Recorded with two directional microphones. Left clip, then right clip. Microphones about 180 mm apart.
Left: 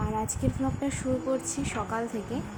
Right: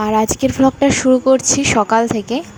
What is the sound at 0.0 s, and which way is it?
Speech, 50° right (ahead or behind).